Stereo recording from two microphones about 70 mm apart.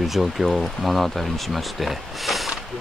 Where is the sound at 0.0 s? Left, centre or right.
Centre.